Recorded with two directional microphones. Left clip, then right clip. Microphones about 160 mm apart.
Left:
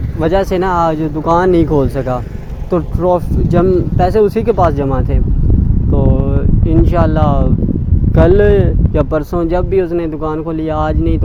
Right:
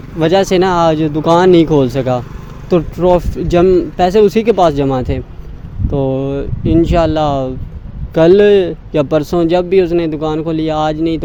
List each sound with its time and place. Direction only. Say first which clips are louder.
0.2 s speech: right 3 dB; 45° right (ahead or behind)